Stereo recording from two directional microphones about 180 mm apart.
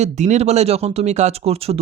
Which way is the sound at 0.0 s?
40° right (ahead or behind).